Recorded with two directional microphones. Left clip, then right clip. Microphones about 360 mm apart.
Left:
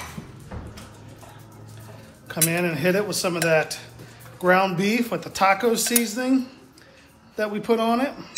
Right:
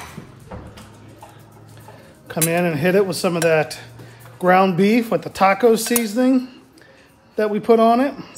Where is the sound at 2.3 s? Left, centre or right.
Right.